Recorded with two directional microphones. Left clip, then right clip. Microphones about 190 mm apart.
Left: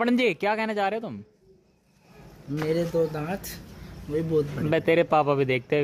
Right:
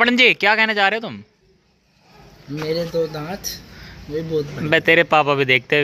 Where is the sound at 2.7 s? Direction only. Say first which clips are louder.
Right 4 dB; centre (ahead or behind).